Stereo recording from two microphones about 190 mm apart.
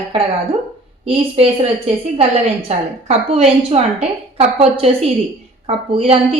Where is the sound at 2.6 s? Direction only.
35° right (ahead or behind).